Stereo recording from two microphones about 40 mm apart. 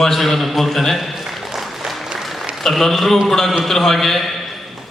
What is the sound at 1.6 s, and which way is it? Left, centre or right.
Applause, centre.